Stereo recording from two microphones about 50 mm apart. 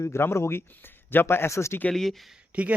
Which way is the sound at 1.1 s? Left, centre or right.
Left.